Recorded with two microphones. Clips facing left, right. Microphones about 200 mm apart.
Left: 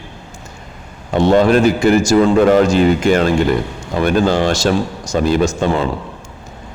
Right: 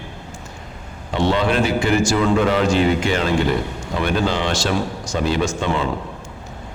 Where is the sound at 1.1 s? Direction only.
45° left (ahead or behind).